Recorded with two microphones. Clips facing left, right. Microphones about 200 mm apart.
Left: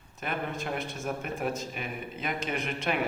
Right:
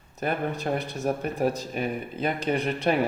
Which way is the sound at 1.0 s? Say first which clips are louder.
Right 8 dB; 35° right (ahead or behind).